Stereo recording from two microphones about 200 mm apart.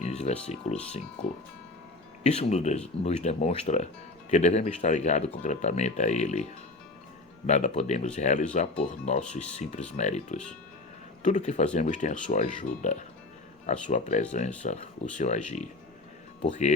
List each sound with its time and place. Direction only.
0.0 s a sound: 35° left (ahead or behind)
0.4 s speech: 35° left (ahead or behind)
2.2 s speech: 35° left (ahead or behind)
7.4 s speech: 35° left (ahead or behind)